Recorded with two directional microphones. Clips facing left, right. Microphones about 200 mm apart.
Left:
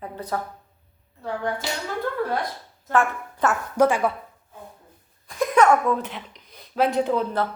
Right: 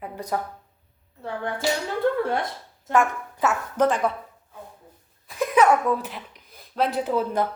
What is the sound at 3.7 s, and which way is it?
Speech, 10° left (ahead or behind).